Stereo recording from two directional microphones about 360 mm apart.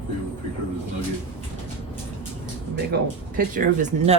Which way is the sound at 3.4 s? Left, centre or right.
Right.